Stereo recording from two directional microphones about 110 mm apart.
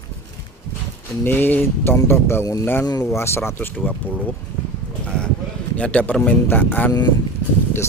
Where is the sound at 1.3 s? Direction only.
15° left (ahead or behind).